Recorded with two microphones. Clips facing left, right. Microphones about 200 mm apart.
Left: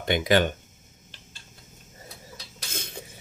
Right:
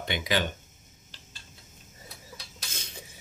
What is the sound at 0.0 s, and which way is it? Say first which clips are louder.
Speech: left 7 dB; 50° left (ahead or behind).